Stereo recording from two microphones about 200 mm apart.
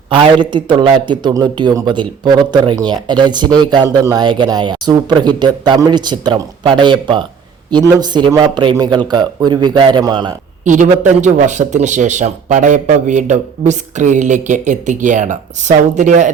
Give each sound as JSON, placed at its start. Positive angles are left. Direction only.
{"t": 0.5, "sound": "speech", "side_deg": -25}
{"t": 10.6, "sound": "speech", "side_deg": -40}